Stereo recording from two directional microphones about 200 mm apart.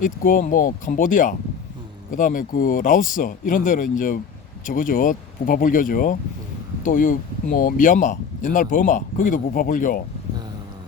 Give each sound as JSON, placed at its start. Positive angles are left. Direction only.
{"t": 0.0, "sound": "speech", "side_deg": 45}